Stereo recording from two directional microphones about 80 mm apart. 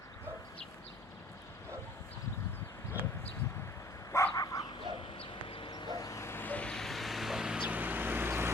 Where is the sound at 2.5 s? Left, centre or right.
Left.